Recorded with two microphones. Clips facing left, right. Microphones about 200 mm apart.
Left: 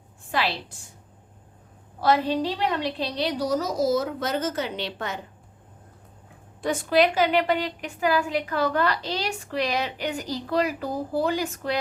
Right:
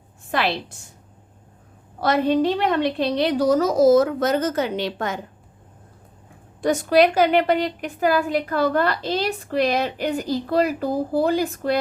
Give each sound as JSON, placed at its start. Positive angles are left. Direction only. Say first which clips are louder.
{"t": 0.3, "sound": "a woman's voice", "louder": "right 4 dB", "side_deg": -50}
{"t": 2.0, "sound": "a woman's voice", "louder": "right 4 dB", "side_deg": -45}
{"t": 6.6, "sound": "a woman's voice", "louder": "right 5 dB", "side_deg": -40}
{"t": 8.2, "sound": "a woman's voice", "louder": "right 4 dB", "side_deg": -35}